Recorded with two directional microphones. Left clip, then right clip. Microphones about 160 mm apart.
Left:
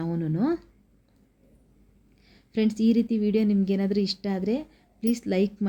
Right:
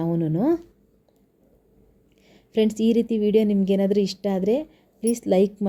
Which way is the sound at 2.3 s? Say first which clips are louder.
Right 5 dB; 25° right (ahead or behind).